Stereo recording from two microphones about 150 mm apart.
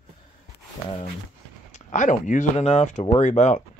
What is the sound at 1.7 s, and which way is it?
Speech, 55° left (ahead or behind).